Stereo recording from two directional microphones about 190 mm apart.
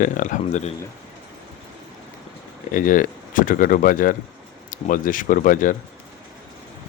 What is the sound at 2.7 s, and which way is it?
Speech, 45° left (ahead or behind).